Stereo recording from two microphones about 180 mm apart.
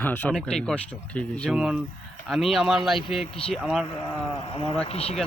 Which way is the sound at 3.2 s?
35° left (ahead or behind).